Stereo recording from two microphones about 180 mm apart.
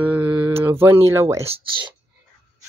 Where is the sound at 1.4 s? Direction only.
30° right (ahead or behind).